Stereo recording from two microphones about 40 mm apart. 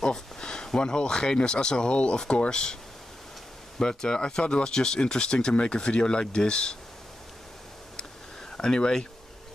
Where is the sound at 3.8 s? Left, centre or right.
Centre.